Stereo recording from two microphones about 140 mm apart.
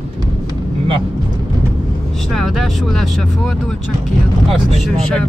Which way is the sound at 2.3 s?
Centre (ahead or behind).